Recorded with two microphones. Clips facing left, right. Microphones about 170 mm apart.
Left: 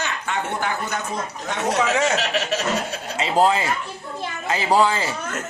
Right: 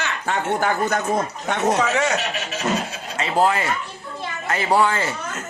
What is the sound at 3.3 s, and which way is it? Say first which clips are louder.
Speech: left 1 dB; 15° left (ahead or behind).